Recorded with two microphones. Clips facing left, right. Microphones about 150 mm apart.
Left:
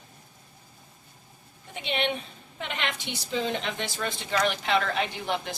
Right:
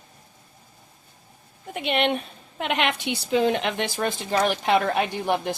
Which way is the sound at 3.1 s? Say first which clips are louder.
Right 8 dB; 60° right (ahead or behind).